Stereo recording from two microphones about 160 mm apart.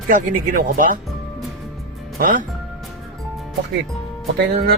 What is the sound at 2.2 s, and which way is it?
Speech, 60° right (ahead or behind).